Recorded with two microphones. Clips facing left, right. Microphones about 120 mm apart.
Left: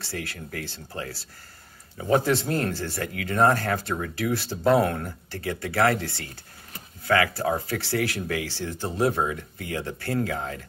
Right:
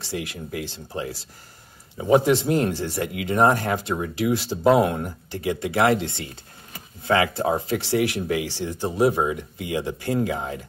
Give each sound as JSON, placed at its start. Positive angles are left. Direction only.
{"t": 0.0, "sound": "speech", "side_deg": -15}